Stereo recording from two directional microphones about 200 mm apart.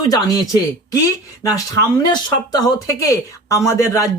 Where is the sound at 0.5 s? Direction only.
15° left (ahead or behind).